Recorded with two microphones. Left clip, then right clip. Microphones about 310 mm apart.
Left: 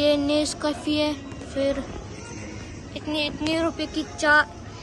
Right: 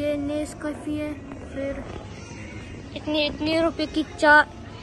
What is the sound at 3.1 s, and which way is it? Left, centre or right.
A woman's voice, centre.